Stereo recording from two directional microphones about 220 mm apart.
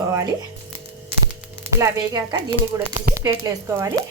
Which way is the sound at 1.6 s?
15° right (ahead or behind).